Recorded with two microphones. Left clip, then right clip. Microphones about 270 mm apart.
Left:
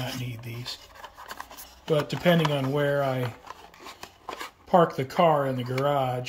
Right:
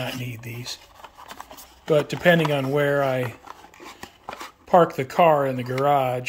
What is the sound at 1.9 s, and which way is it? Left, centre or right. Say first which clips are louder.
Speech: right 5 dB; centre.